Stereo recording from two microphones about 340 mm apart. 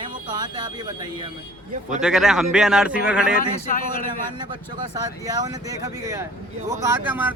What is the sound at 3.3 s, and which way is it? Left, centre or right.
Speech, left.